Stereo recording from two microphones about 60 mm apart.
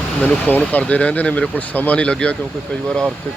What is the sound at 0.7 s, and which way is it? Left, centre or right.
Speech, left.